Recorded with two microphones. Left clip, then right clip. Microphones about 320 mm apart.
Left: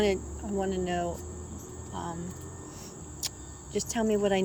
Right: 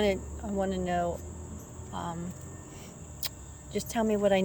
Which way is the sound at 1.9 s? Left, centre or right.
Right.